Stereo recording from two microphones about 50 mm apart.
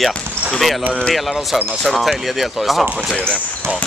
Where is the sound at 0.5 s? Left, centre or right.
Centre.